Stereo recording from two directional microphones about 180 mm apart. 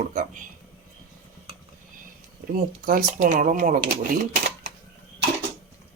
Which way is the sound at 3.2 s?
45° right (ahead or behind).